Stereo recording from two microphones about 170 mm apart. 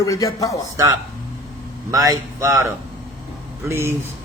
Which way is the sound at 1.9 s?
20° right (ahead or behind).